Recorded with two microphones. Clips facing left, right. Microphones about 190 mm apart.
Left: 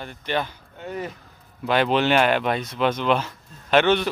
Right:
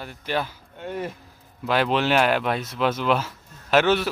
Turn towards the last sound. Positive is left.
turn(degrees=-5)  # may be behind; listen again after turning